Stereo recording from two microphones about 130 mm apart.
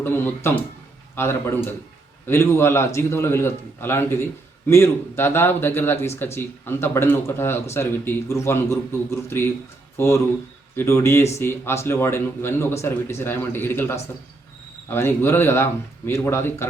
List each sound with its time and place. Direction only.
0.0 s a man's voice: 15° left (ahead or behind)